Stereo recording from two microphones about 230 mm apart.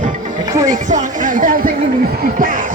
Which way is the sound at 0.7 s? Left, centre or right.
Right.